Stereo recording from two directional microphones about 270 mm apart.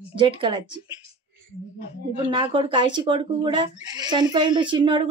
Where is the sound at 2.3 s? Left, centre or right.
Centre.